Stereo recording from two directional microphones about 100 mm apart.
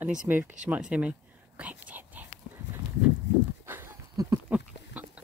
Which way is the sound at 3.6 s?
25° right (ahead or behind).